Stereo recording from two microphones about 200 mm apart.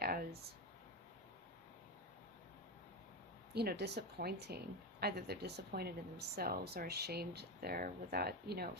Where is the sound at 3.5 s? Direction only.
55° right (ahead or behind).